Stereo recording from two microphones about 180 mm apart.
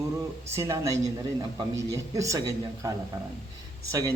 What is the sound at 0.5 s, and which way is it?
Speech, 15° right (ahead or behind).